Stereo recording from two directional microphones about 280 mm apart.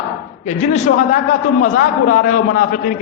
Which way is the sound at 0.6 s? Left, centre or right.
Left.